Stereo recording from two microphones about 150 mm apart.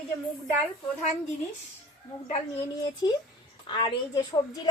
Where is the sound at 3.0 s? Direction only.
30° left (ahead or behind).